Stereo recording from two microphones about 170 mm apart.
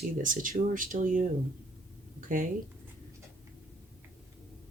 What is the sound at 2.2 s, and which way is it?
Speech, 55° right (ahead or behind).